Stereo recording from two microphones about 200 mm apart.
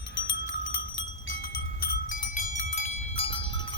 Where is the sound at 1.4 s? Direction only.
50° left (ahead or behind).